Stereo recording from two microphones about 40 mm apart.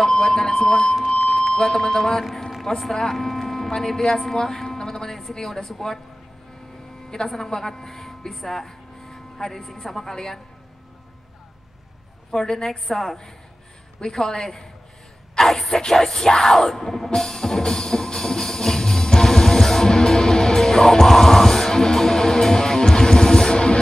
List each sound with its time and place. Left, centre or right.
0.0 s a sound: centre
1.0 s speech: centre
7.2 s speech: centre
12.3 s a woman's voice: centre
15.3 s a sound: centre
15.8 s music: centre